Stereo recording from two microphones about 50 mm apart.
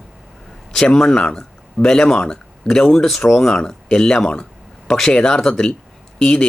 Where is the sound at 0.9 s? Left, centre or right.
Centre.